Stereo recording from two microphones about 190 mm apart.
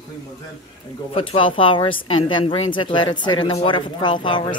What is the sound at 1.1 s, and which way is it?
A woman's voice, 30° left (ahead or behind).